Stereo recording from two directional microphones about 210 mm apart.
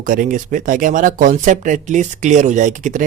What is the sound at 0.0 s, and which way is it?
Speech, 40° right (ahead or behind).